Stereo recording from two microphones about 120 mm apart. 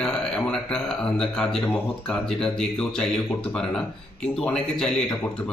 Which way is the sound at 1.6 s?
20° left (ahead or behind).